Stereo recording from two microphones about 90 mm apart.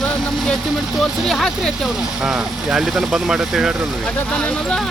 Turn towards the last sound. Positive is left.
turn(degrees=10)  # may be behind; listen again after turning